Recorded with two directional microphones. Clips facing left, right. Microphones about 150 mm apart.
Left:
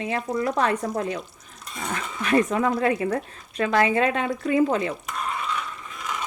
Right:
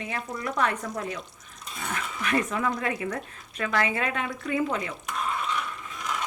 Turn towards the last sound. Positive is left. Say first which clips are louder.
# even
turn(degrees=0)  # may be behind; listen again after turning